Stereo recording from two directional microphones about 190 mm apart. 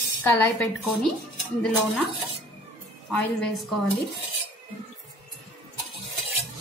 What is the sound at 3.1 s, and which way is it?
Speech, 5° left (ahead or behind).